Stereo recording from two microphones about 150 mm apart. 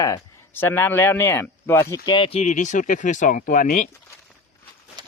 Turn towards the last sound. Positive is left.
turn(degrees=60)  # may be behind; listen again after turning